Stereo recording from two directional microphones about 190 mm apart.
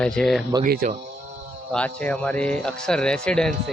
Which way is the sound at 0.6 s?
45° right (ahead or behind).